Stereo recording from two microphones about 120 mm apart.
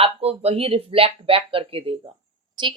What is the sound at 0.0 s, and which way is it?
A woman's voice, 55° right (ahead or behind).